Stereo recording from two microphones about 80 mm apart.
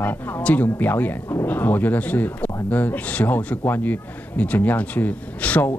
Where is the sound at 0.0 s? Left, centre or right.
Left.